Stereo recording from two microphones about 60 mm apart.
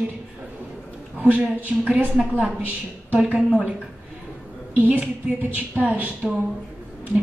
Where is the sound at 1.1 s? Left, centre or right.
Centre.